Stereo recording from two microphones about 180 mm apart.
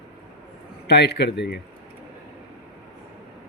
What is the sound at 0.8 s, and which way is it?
Speech, 65° left (ahead or behind).